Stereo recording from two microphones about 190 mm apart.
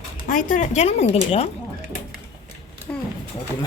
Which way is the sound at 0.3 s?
45° left (ahead or behind).